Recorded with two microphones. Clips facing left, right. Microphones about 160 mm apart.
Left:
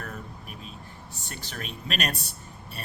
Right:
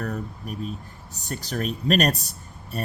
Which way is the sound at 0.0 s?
40° right (ahead or behind).